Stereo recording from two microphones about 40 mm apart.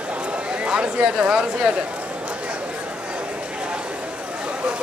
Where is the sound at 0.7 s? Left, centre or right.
Right.